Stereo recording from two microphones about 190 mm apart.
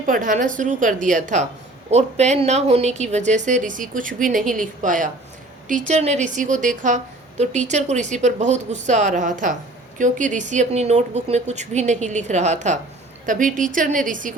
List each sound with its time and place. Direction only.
0.0 s a woman's voice: 45° right (ahead or behind)